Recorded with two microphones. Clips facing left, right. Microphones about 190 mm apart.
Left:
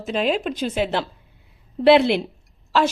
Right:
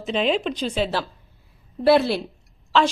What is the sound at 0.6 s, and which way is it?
A woman's voice, 10° left (ahead or behind).